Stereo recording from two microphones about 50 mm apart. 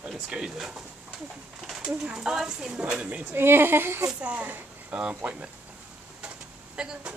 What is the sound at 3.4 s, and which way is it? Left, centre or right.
Speech, right.